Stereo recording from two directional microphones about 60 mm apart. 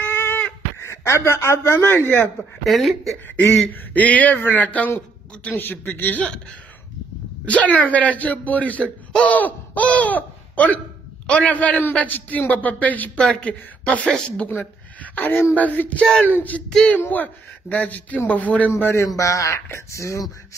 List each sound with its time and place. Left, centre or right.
0.0 s a sound: left
0.7 s speech: left
2.6 s speech: centre
3.9 s speech: left
5.9 s speech: left
7.4 s speech: left
14.5 s a sound: left
15.5 s speech: left
16.6 s speech: centre
17.1 s speech: left
18.7 s a man's voice: left
19.0 s speech: left